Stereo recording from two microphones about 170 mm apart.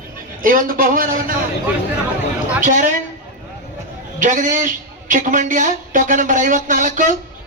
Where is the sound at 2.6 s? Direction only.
50° right (ahead or behind).